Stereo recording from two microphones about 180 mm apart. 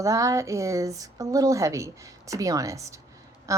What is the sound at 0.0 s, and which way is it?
Speech, 15° right (ahead or behind).